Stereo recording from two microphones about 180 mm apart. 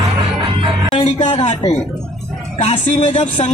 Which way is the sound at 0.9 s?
25° left (ahead or behind).